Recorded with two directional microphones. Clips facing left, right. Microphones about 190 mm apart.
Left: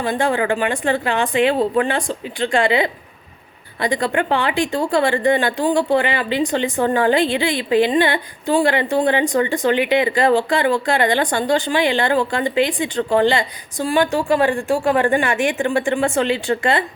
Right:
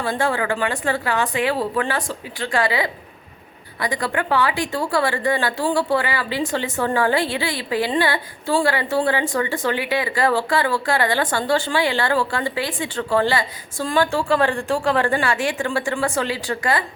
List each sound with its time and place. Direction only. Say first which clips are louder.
0.0 s speech: left 3 dB; 20° left (ahead or behind)